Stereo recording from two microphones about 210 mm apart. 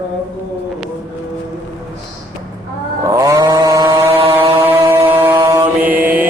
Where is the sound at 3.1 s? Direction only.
15° right (ahead or behind).